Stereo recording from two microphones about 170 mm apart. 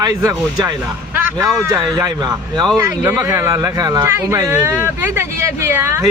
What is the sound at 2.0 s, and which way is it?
Speech, 25° right (ahead or behind).